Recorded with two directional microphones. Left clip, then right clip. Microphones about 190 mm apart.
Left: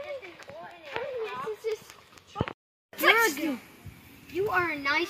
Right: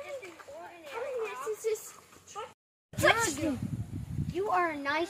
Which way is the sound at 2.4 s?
5° left (ahead or behind).